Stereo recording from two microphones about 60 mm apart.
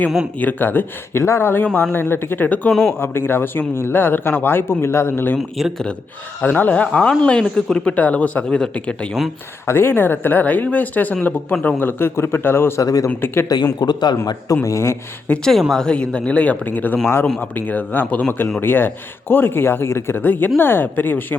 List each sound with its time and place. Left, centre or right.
0.3 s speech: left
1.2 s speech: left
1.6 s speech: left
1.9 s speech: left
5.4 s speech: centre
6.4 s speech: left; by 7.9 s centre
7.9 s speech: left
9.6 s speech: left
11.8 s speech: left
12.8 s speech: left
13.1 s speech: left
13.5 s speech: left
14.5 s speech: left
15.3 s speech: left